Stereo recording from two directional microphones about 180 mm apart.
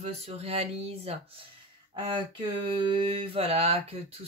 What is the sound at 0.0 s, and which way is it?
Mantra, 35° right (ahead or behind).